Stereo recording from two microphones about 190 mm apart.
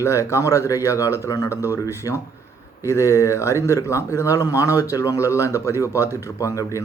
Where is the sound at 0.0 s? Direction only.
15° left (ahead or behind).